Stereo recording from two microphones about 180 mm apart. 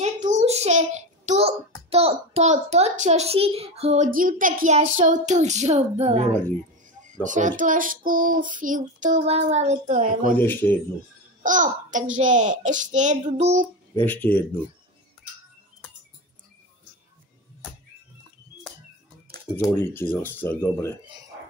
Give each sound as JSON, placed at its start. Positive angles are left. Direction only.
{"t": 0.0, "sound": "a child's voice", "side_deg": -40}
{"t": 7.2, "sound": "child singing", "side_deg": -45}
{"t": 10.3, "sound": "speech", "side_deg": 10}
{"t": 11.4, "sound": "a child's voice", "side_deg": -45}
{"t": 12.2, "sound": "child singing", "side_deg": -40}
{"t": 14.0, "sound": "speech", "side_deg": 10}
{"t": 19.5, "sound": "speech", "side_deg": 15}